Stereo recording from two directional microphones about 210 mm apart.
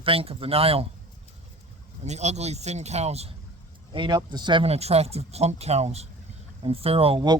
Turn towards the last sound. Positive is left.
turn(degrees=-25)  # may be behind; listen again after turning